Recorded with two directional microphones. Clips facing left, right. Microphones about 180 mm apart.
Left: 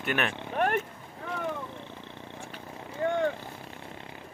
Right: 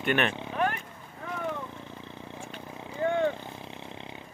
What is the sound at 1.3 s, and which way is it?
Wild animals, 5° right (ahead or behind).